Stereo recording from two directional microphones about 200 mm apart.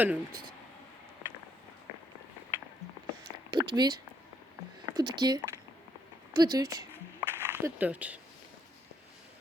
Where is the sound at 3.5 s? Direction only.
20° right (ahead or behind).